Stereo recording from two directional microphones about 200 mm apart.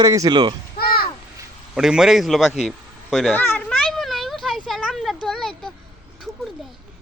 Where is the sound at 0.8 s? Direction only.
50° left (ahead or behind).